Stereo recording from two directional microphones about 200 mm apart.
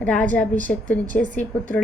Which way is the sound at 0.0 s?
5° left (ahead or behind).